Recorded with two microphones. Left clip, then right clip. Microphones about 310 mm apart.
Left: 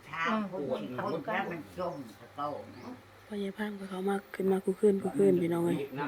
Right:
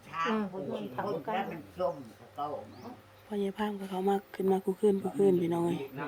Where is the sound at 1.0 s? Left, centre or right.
Right.